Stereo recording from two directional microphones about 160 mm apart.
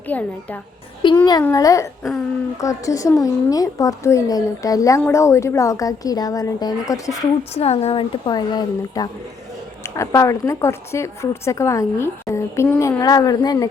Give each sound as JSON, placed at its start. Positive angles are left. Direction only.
{"t": 0.1, "sound": "a woman's voice", "side_deg": 10}
{"t": 1.0, "sound": "a woman's voice", "side_deg": 30}
{"t": 7.5, "sound": "a woman's voice", "side_deg": 40}